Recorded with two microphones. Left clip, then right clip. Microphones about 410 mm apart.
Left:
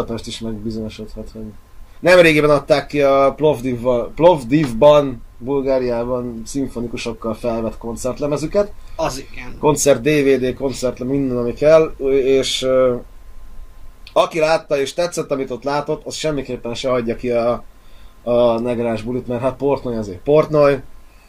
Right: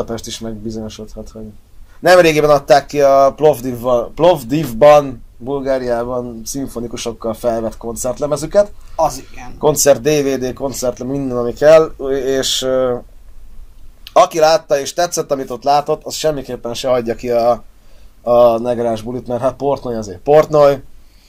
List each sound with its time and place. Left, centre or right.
0.1 s speech: centre
2.0 s speech: centre
3.4 s speech: right
3.9 s speech: centre
14.2 s speech: centre